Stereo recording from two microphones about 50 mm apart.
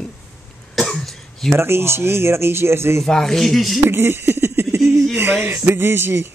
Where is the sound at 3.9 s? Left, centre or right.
Right.